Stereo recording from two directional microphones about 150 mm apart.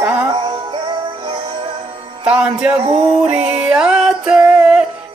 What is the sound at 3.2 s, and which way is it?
Music, 5° right (ahead or behind).